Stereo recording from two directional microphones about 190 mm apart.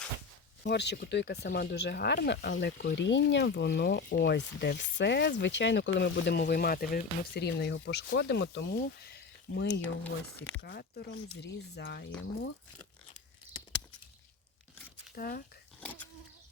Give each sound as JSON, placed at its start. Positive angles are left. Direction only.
{"t": 0.6, "sound": "speech", "side_deg": 60}
{"t": 15.1, "sound": "speech", "side_deg": 50}